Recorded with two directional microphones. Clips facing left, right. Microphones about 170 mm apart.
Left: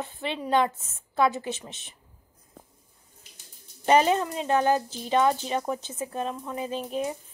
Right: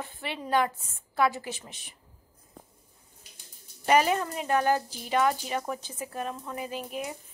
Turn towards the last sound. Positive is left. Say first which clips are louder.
# left 5 dB
turn(degrees=30)  # may be behind; listen again after turning